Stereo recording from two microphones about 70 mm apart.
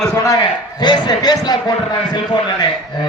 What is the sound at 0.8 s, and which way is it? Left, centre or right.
Speech, left.